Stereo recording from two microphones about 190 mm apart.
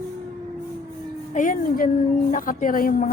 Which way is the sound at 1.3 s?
45° left (ahead or behind).